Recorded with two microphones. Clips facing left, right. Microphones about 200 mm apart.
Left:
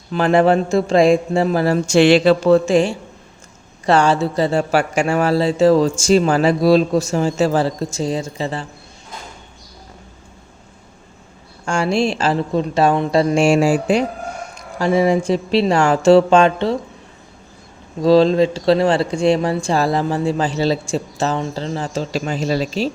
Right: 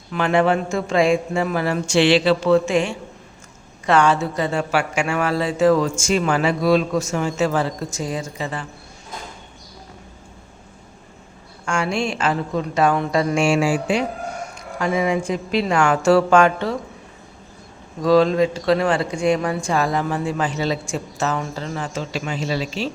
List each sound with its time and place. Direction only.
0.1 s speech: 35° left (ahead or behind)
11.6 s speech: 35° left (ahead or behind)
18.0 s speech: 30° left (ahead or behind)